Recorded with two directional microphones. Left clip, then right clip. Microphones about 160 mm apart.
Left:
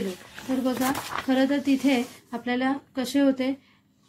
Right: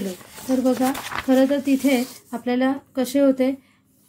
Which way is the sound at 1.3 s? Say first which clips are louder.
Right 5 dB; 25° right (ahead or behind).